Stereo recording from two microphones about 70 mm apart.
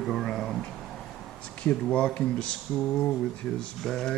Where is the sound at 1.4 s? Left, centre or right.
Centre.